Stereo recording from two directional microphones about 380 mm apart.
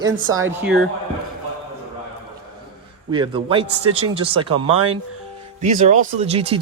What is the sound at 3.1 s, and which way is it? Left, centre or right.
Speech, centre.